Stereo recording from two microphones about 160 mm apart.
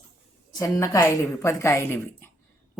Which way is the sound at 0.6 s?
20° left (ahead or behind).